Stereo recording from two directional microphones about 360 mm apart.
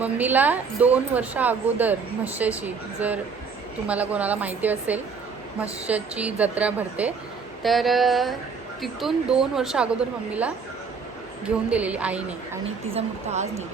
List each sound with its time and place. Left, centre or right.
0.0 s a woman's voice: centre
11.4 s a woman's voice: centre
12.9 s a woman's voice: centre